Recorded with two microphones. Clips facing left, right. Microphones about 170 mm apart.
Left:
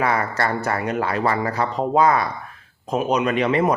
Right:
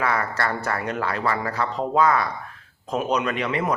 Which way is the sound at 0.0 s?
15° left (ahead or behind).